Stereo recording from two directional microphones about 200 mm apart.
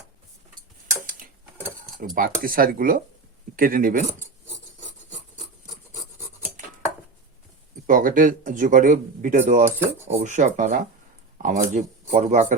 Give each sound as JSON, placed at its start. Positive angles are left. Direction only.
{"t": 1.0, "sound": "tick-tock", "side_deg": -45}
{"t": 2.1, "sound": "speech", "side_deg": -45}
{"t": 7.9, "sound": "speech", "side_deg": -40}